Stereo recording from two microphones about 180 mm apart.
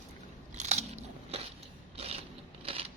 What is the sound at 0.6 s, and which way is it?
Scissors, 40° right (ahead or behind).